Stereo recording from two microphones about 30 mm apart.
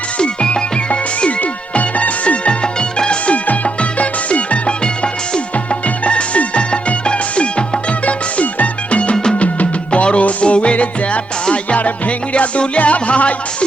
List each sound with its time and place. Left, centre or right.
0.2 s music: left
1.7 s music: left
6.1 s music: left
8.0 s music: left